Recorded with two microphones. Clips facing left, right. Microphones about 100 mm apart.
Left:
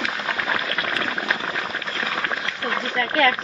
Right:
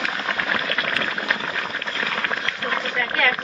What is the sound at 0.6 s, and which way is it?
Boiling, 10° left (ahead or behind).